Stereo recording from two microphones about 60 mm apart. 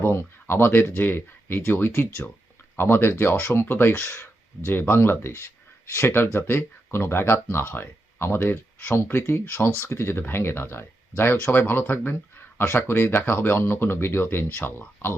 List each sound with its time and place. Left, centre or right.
0.0 s speech: left
4.0 s speech: left
4.6 s speech: left